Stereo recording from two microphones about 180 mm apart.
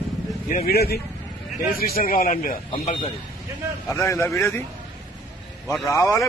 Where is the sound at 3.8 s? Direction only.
15° left (ahead or behind).